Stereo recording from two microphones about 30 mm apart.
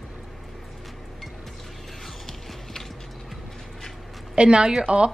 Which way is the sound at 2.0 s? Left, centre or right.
Centre.